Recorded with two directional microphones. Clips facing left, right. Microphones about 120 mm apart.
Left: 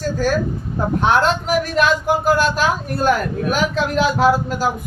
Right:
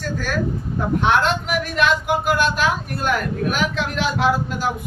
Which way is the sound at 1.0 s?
40° left (ahead or behind).